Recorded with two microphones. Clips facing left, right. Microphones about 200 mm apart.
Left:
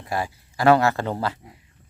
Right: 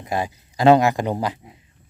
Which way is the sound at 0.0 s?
20° right (ahead or behind).